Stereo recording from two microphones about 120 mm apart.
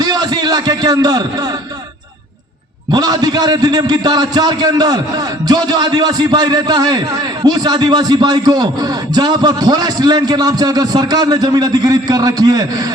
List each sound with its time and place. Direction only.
0.0 s a man's voice: 35° right (ahead or behind)
2.9 s a man's voice: 35° right (ahead or behind)